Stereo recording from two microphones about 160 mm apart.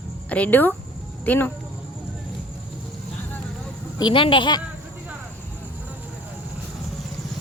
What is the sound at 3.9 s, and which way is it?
Speech, 30° left (ahead or behind).